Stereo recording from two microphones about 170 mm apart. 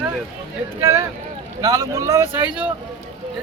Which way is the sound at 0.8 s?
15° right (ahead or behind).